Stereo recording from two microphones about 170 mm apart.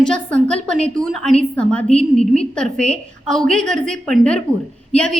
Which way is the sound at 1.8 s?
40° left (ahead or behind).